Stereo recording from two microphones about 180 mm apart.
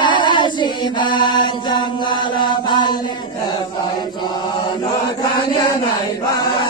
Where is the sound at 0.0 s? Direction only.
25° left (ahead or behind).